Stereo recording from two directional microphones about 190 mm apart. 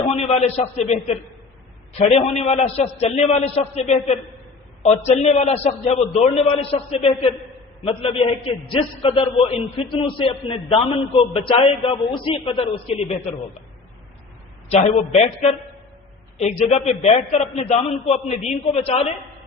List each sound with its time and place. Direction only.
0.1 s a man's voice: 35° left (ahead or behind)
14.7 s a man's voice: 35° left (ahead or behind)